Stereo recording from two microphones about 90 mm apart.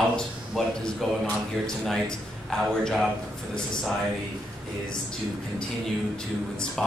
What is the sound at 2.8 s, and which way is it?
Speech, centre (ahead or behind).